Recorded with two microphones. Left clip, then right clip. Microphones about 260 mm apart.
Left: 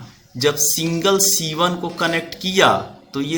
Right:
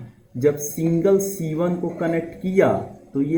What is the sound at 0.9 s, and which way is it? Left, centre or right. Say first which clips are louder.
A man's voice: even; left.